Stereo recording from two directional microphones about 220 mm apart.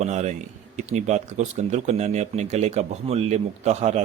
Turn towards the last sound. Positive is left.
turn(degrees=-30)  # may be behind; listen again after turning